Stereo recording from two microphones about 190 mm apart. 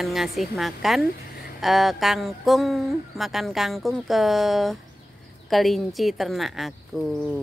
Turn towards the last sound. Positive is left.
turn(degrees=0)  # may be behind; listen again after turning